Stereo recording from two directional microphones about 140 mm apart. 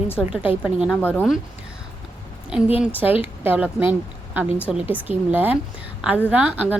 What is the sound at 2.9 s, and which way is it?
A woman's voice, 15° right (ahead or behind).